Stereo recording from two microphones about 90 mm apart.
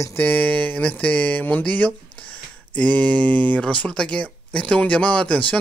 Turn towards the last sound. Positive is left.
turn(degrees=15)  # may be behind; listen again after turning